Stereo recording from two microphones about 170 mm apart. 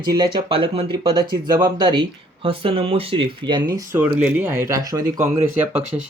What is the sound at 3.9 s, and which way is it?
Speech, 10° right (ahead or behind).